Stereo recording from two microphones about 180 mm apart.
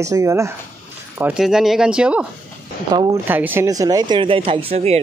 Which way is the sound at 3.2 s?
10° right (ahead or behind).